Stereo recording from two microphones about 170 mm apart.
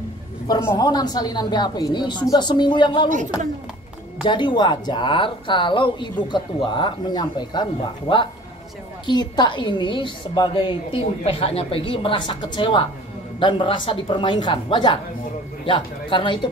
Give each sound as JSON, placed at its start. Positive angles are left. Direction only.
{"t": 0.5, "sound": "speech", "side_deg": 20}
{"t": 4.2, "sound": "speech", "side_deg": 25}